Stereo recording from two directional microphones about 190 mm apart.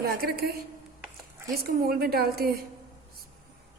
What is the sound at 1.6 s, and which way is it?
A woman's voice, 55° right (ahead or behind).